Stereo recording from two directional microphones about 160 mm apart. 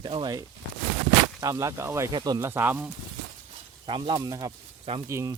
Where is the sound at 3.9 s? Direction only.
30° right (ahead or behind).